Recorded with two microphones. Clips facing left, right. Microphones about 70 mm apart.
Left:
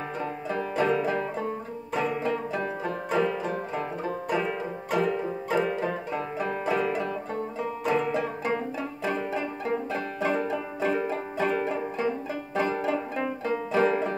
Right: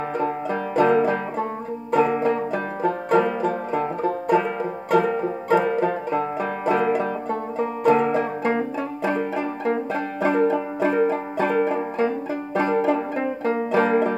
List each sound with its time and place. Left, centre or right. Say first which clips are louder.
0.2 s banjo: right 4 dB; right
9.1 s music: right 5 dB; right
12.5 s banjo: right 6 dB; right